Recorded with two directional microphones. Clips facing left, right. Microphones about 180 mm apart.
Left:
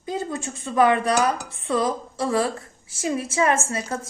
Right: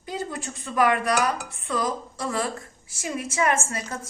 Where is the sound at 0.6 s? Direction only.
25° left (ahead or behind).